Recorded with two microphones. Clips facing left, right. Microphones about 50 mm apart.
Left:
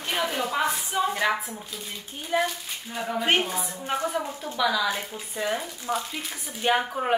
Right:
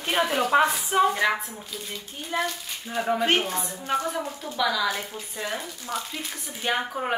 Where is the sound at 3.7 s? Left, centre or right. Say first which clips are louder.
Right 2 dB; centre.